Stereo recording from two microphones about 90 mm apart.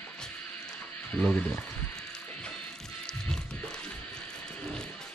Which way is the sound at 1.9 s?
10° left (ahead or behind).